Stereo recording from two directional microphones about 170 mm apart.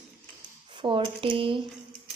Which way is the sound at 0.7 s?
30° right (ahead or behind).